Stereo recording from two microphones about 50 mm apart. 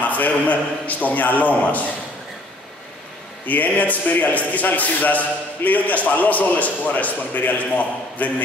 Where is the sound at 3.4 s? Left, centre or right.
Left.